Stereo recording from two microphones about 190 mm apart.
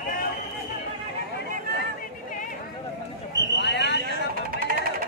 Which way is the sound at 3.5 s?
65° left (ahead or behind).